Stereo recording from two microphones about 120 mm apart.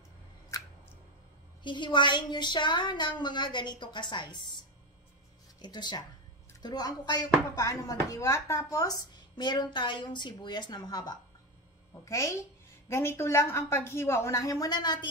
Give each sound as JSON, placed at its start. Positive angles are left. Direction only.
{"t": 1.6, "sound": "speech", "side_deg": 40}
{"t": 5.6, "sound": "speech", "side_deg": 40}
{"t": 11.9, "sound": "a woman's voice", "side_deg": 25}